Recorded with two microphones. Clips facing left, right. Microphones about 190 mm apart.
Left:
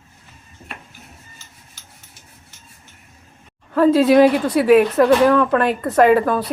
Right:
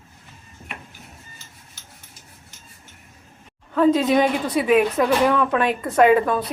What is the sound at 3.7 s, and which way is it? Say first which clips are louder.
A woman's voice: left 5 dB; 5° left (ahead or behind).